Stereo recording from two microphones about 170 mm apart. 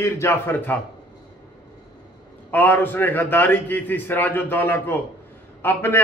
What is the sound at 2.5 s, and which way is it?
A man's voice, 10° left (ahead or behind).